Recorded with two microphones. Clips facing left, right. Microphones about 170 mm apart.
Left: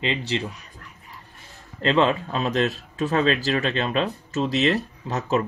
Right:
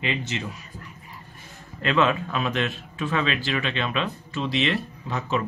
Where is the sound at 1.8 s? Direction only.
30° left (ahead or behind).